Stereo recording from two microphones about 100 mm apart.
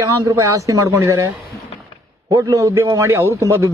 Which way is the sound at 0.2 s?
35° right (ahead or behind).